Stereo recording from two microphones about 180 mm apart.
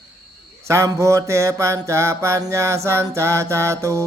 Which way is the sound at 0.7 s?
15° right (ahead or behind).